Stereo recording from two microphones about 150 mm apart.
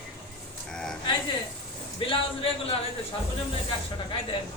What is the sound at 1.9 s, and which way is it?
Speech, 35° left (ahead or behind).